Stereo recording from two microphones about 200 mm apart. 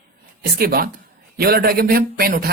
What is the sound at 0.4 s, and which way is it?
Speech, 50° right (ahead or behind).